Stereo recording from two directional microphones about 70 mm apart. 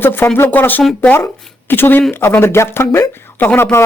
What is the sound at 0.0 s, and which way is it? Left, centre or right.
Speech, left.